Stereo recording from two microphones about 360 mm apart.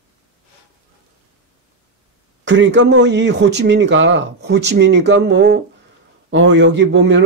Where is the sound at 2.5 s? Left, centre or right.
Right.